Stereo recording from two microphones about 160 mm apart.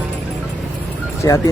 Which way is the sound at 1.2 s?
20° left (ahead or behind).